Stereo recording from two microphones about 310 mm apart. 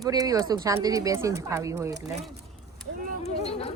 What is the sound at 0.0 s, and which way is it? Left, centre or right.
Speech, centre.